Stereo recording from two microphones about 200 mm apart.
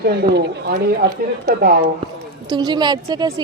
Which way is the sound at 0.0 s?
50° right (ahead or behind).